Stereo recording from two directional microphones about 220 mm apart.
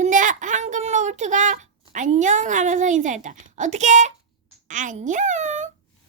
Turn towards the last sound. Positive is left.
turn(degrees=-30)  # may be behind; listen again after turning